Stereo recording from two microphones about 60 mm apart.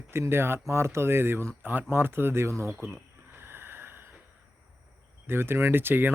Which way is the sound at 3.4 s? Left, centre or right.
Right.